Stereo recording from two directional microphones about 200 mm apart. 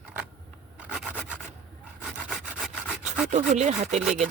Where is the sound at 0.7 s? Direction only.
5° right (ahead or behind).